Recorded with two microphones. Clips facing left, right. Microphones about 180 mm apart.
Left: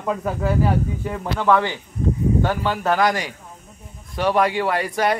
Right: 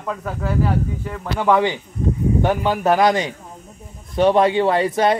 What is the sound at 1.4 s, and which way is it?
Speech, 15° right (ahead or behind).